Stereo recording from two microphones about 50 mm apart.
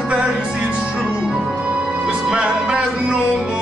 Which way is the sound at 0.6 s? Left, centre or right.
Right.